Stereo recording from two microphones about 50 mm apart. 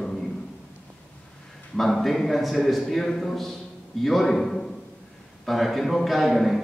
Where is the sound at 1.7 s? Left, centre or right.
Centre.